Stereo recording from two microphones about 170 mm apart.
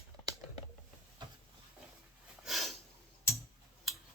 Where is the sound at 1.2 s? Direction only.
25° right (ahead or behind).